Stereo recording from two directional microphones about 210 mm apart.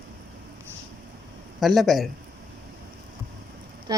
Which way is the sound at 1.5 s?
Centre (ahead or behind).